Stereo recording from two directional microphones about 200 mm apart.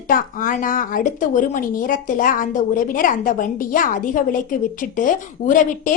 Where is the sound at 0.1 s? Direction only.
40° left (ahead or behind).